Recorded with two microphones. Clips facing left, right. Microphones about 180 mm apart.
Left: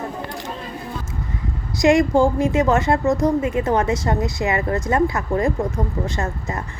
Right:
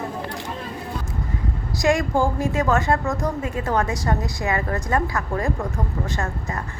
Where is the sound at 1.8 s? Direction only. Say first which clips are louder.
Left 5 dB; 20° left (ahead or behind).